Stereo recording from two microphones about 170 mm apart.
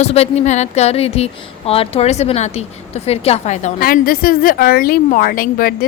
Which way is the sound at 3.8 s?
60° left (ahead or behind).